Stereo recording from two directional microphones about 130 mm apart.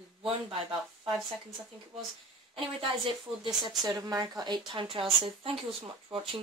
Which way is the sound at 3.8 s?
30° right (ahead or behind).